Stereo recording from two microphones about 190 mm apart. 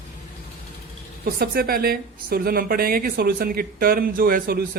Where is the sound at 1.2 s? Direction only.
50° right (ahead or behind).